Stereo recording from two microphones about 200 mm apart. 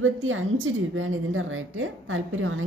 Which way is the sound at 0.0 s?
80° right.